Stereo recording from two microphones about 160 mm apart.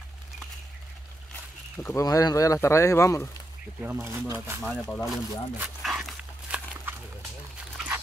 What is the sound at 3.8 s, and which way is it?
Speech, 10° right (ahead or behind).